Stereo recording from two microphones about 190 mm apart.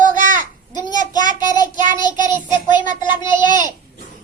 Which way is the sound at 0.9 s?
20° left (ahead or behind).